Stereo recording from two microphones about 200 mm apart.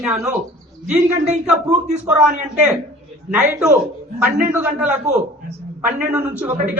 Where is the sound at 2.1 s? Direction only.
5° right (ahead or behind).